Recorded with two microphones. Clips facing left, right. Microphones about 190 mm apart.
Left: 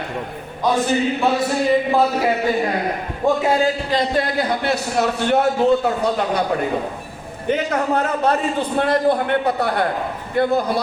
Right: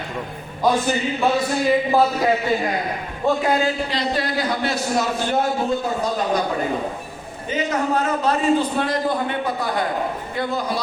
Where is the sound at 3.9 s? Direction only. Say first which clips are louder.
Left 4 dB; 50° left (ahead or behind); by 5.5 s 65° left (ahead or behind).